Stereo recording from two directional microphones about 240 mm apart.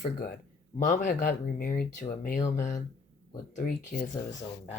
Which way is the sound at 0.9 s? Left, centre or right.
Left.